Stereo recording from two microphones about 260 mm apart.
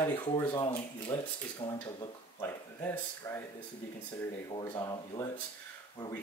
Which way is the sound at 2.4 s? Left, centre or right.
Centre.